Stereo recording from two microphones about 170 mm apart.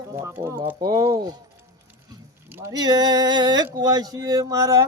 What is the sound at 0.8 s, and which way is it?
Music, 25° right (ahead or behind).